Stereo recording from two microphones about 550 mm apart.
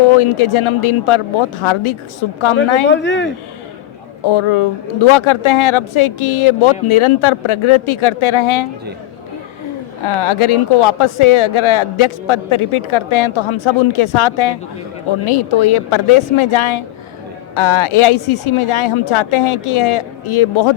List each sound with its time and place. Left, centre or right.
0.2 s speech: left
2.8 s speech: centre
4.3 s speech: left
10.0 s speech: left